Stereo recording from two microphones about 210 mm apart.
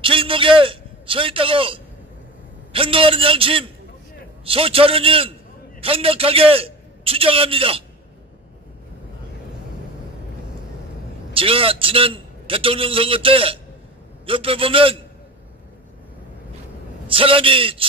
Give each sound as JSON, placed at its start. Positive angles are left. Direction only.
{"t": 0.0, "sound": "a man's voice", "side_deg": -25}
{"t": 11.3, "sound": "a man's voice", "side_deg": -25}
{"t": 17.1, "sound": "a man's voice", "side_deg": -25}